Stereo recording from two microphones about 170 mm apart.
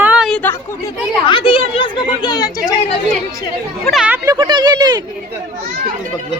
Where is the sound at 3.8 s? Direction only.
Centre (ahead or behind).